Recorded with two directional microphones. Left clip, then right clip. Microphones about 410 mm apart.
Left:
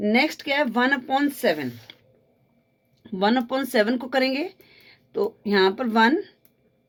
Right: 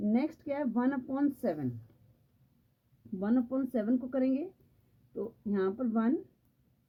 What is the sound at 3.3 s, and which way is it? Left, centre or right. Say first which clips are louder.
A woman's voice: left 10 dB; centre.